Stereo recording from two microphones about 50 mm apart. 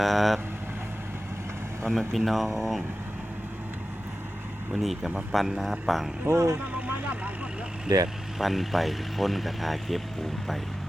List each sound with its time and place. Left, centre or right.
0.0 s speech: centre
1.8 s speech: centre
4.7 s speech: centre
6.2 s speech: right
8.4 s speech: centre